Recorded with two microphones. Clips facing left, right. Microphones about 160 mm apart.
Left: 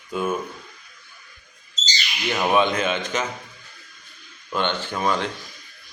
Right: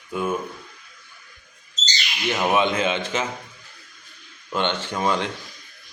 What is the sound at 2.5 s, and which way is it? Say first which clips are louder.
Speech: left 2 dB; 25° right (ahead or behind).